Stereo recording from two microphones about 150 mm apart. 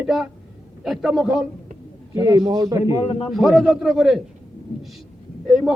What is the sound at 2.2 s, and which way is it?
Speech, 25° right (ahead or behind).